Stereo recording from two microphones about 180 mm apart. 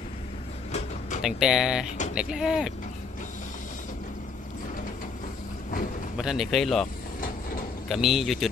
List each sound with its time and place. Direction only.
0.7 s a sound: 40° left (ahead or behind)
1.2 s a man's voice: 5° right (ahead or behind)
6.1 s a man's voice: 5° right (ahead or behind)
7.9 s a man's voice: centre (ahead or behind)